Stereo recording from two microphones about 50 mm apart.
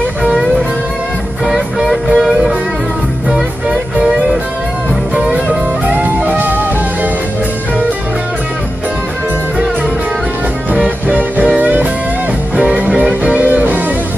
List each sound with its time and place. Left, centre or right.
1.4 s music: centre
4.0 s music: centre
5.3 s music: right
10.7 s music: right